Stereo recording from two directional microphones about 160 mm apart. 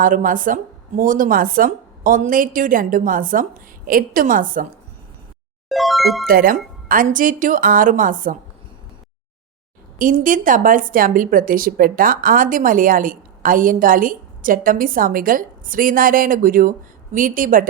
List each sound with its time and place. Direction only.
0.0 s a woman's voice: 55° right (ahead or behind)
5.6 s music: centre (ahead or behind)
6.2 s a woman's voice: 65° right (ahead or behind)
10.0 s a woman's voice: 55° right (ahead or behind)